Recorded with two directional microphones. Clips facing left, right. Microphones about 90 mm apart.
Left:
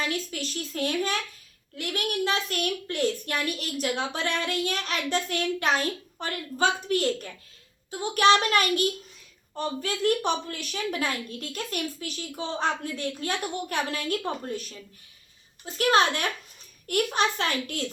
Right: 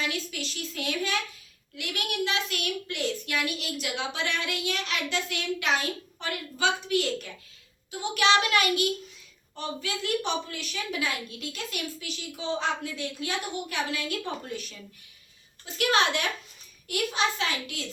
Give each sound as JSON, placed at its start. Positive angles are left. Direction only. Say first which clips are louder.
{"t": 0.0, "sound": "a child's voice", "louder": "left 2 dB", "side_deg": 40}
{"t": 15.6, "sound": "a child's voice", "louder": "left 3 dB", "side_deg": 40}